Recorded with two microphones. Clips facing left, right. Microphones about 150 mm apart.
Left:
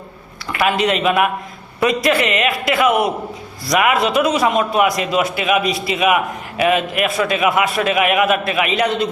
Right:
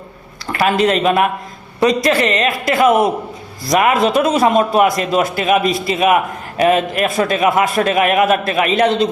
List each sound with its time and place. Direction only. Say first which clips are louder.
0.5 s a man's voice: right 3 dB; 40° right (ahead or behind)